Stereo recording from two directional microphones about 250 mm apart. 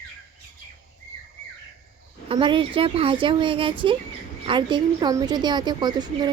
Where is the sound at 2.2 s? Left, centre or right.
Centre.